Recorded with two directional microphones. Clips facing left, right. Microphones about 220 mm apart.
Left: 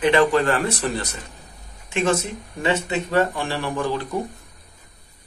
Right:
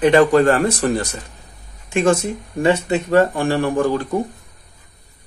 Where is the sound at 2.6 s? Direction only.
45° right (ahead or behind).